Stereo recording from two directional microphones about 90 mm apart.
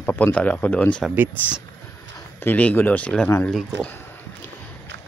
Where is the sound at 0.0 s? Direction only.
20° left (ahead or behind).